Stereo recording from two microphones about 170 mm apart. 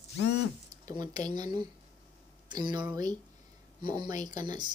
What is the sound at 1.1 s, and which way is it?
Speech, 25° right (ahead or behind).